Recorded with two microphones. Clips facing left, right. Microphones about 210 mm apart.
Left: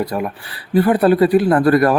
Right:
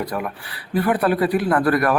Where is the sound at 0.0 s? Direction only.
25° left (ahead or behind).